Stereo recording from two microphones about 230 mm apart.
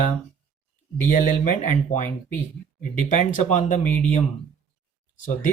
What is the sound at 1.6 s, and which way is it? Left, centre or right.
Speech, left.